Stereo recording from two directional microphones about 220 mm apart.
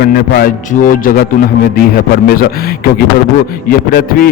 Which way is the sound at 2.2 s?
45° left (ahead or behind).